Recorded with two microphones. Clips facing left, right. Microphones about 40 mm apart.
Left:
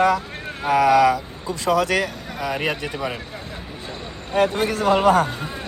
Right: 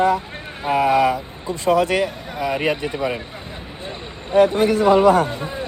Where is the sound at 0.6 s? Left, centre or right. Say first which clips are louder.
Left 1 dB; right; by 3.2 s centre.